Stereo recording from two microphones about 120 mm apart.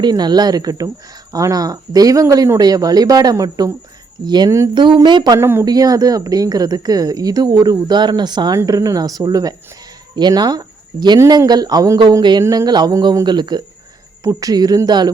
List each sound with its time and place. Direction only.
0.0 s speech: 35° right (ahead or behind)
5.4 s speech: 20° right (ahead or behind)
5.6 s speech: 30° right (ahead or behind)